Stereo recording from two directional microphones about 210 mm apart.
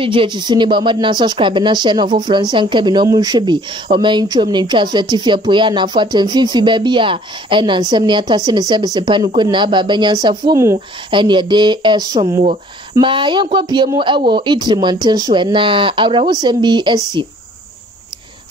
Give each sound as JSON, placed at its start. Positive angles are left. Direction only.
{"t": 0.0, "sound": "speech", "side_deg": -25}